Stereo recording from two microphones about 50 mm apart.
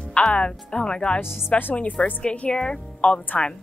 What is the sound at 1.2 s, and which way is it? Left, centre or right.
Speech, centre.